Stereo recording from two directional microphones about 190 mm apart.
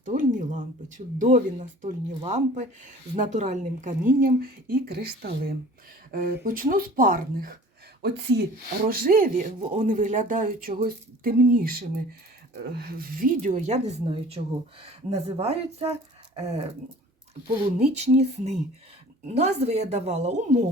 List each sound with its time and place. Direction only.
0.0 s speech: 45° right (ahead or behind)
8.0 s speech: 60° right (ahead or behind)
8.9 s speech: 50° right (ahead or behind); by 16.6 s 30° right (ahead or behind)
17.7 s speech: 35° right (ahead or behind)